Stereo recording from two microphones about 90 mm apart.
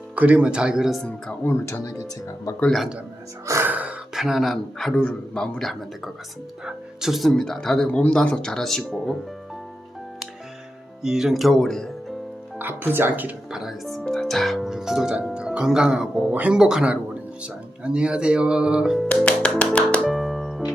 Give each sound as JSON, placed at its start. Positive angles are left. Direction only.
{"t": 0.2, "sound": "speech", "side_deg": -10}
{"t": 1.5, "sound": "speech", "side_deg": 25}
{"t": 1.8, "sound": "speech", "side_deg": 40}
{"t": 2.6, "sound": "speech", "side_deg": 0}
{"t": 3.6, "sound": "gasp", "side_deg": -15}
{"t": 4.1, "sound": "speech", "side_deg": -5}
{"t": 11.0, "sound": "speech", "side_deg": -5}
{"t": 12.5, "sound": "speech", "side_deg": -20}
{"t": 13.5, "sound": "speech", "side_deg": -5}
{"t": 19.2, "sound": "music", "side_deg": 15}
{"t": 20.1, "sound": "music", "side_deg": 0}